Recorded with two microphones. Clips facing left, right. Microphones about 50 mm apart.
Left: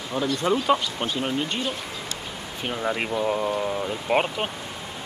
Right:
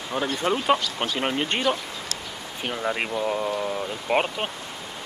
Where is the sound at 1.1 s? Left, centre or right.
Right.